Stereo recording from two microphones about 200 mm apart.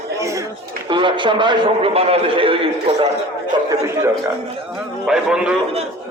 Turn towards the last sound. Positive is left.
turn(degrees=-5)  # may be behind; listen again after turning